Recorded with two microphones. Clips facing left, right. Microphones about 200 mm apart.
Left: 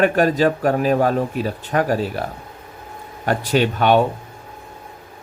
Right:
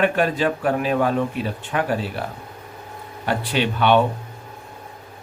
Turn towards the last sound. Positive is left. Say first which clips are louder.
# left 2 dB
turn(degrees=45)  # may be behind; listen again after turning